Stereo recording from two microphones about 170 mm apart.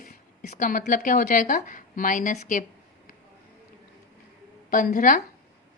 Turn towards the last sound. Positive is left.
turn(degrees=55)  # may be behind; listen again after turning